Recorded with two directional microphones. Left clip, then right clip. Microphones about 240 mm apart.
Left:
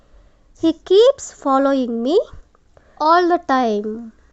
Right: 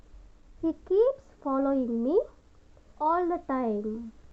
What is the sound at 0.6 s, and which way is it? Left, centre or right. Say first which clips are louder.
Speech: left 12 dB; left.